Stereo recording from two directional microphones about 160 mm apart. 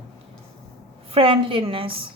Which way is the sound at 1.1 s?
35° right (ahead or behind).